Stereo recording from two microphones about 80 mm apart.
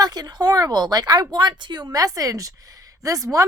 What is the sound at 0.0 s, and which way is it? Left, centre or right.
A woman's voice, right.